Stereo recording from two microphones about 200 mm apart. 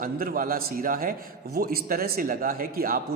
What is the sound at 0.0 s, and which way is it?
Speech, 45° right (ahead or behind).